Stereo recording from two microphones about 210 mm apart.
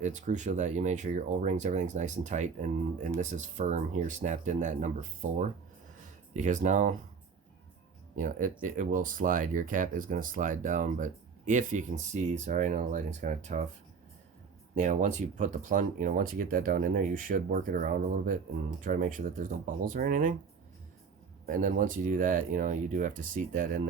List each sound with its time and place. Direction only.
0.0 s speech: 35° right (ahead or behind)
8.1 s speech: 40° right (ahead or behind)
14.8 s speech: 35° right (ahead or behind)
21.4 s speech: 40° right (ahead or behind)